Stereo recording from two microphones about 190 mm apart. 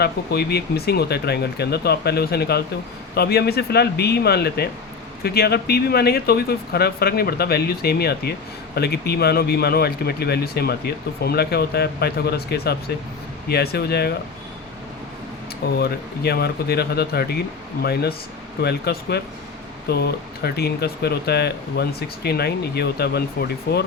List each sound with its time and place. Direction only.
0.0 s speech: 60° left (ahead or behind)
15.8 s speech: 55° left (ahead or behind)